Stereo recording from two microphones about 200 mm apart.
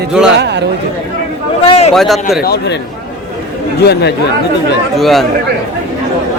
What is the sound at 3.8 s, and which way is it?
Speech, 55° left (ahead or behind).